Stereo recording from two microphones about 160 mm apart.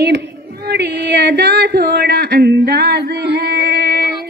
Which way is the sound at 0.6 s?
85° right.